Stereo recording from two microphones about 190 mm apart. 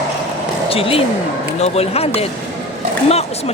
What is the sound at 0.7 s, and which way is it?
Speech, 30° left (ahead or behind).